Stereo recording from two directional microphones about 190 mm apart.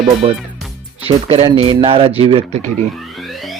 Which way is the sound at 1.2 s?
30° right (ahead or behind).